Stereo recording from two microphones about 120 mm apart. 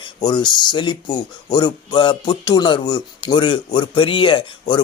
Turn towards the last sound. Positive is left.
turn(degrees=40)  # may be behind; listen again after turning